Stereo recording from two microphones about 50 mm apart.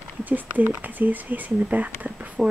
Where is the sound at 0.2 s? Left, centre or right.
Right.